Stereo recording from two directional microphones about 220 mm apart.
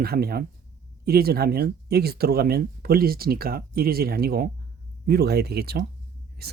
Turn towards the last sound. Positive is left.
turn(degrees=-45)  # may be behind; listen again after turning